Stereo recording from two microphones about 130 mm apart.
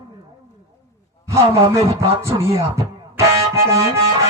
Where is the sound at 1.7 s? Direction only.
25° right (ahead or behind).